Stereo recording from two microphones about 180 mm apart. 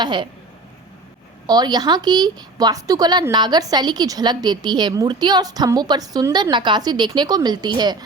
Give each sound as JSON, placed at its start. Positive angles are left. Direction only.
{"t": 0.0, "sound": "a woman's voice", "side_deg": -25}
{"t": 1.5, "sound": "a woman's voice", "side_deg": -20}